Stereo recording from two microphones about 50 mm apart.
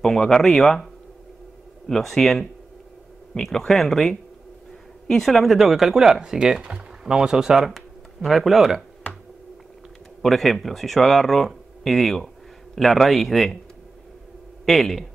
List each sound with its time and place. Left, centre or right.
0.0 s speech: centre
1.9 s speech: centre
10.2 s speech: centre
14.7 s speech: centre